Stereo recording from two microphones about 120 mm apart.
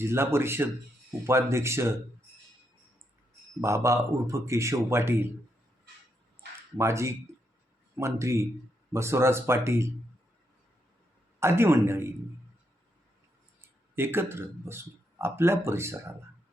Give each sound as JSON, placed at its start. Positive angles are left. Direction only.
{"t": 0.0, "sound": "speech", "side_deg": -20}
{"t": 3.6, "sound": "speech", "side_deg": -25}
{"t": 6.7, "sound": "speech", "side_deg": -25}
{"t": 11.3, "sound": "speech", "side_deg": -20}
{"t": 13.6, "sound": "speech", "side_deg": -20}